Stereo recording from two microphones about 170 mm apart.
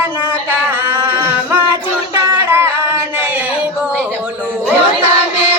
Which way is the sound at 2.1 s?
15° right (ahead or behind).